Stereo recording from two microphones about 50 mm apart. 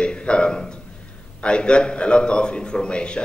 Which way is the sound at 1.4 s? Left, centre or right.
Centre.